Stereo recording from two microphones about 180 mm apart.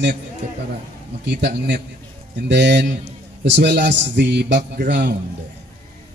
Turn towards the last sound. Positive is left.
turn(degrees=-70)  # may be behind; listen again after turning